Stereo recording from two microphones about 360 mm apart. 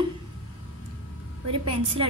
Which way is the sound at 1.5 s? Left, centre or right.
Centre.